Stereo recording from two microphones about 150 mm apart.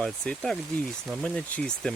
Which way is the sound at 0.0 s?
5° left (ahead or behind).